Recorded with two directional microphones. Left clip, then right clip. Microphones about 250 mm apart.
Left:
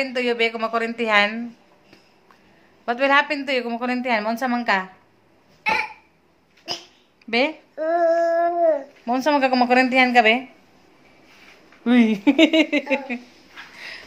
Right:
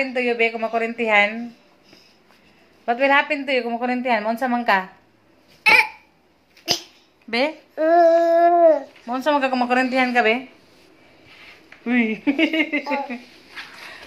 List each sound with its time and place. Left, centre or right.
0.0 s a woman's voice: centre
2.8 s a woman's voice: centre
7.2 s speech: centre
7.7 s babbling: centre
9.0 s speech: left
12.0 s speech: left